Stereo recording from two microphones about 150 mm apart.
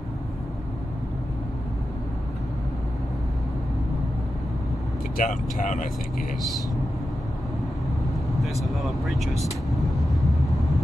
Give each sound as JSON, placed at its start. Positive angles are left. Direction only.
{"t": 5.1, "sound": "speech", "side_deg": 60}
{"t": 8.4, "sound": "speech", "side_deg": 0}